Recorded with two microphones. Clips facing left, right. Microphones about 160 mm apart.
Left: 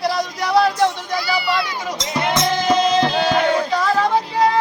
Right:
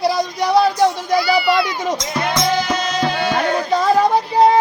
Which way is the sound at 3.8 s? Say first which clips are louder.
Right 3 dB; 25° right (ahead or behind).